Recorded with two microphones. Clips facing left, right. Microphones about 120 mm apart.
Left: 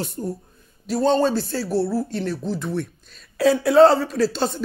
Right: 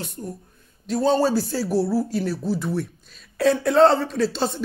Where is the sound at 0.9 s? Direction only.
Centre (ahead or behind).